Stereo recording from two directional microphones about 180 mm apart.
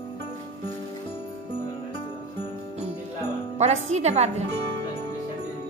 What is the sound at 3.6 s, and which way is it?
Speech, 40° right (ahead or behind).